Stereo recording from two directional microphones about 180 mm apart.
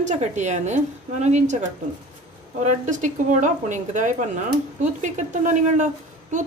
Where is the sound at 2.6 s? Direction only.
40° right (ahead or behind).